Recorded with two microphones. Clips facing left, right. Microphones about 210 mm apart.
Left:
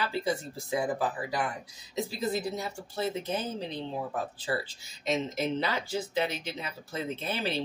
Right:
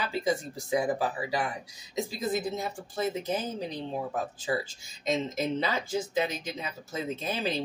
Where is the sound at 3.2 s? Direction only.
35° right (ahead or behind).